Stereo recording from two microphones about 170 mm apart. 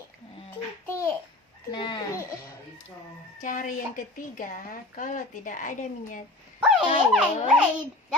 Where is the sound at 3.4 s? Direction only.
50° left (ahead or behind).